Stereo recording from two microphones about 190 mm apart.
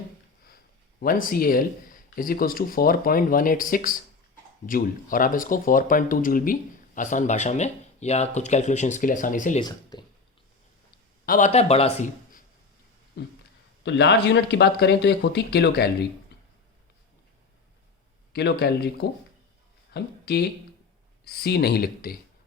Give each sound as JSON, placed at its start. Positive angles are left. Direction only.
{"t": 0.9, "sound": "speech", "side_deg": 50}
{"t": 9.6, "sound": "speech", "side_deg": 20}
{"t": 11.3, "sound": "speech", "side_deg": 40}
{"t": 13.2, "sound": "speech", "side_deg": 60}
{"t": 18.3, "sound": "speech", "side_deg": 60}
{"t": 19.9, "sound": "speech", "side_deg": 60}